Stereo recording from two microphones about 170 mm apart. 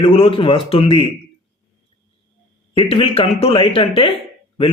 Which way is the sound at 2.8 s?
35° left (ahead or behind).